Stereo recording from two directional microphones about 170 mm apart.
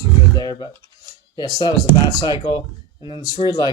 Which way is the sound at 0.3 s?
25° left (ahead or behind).